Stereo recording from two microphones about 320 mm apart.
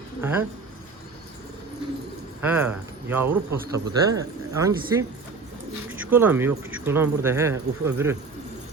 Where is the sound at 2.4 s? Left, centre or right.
Centre.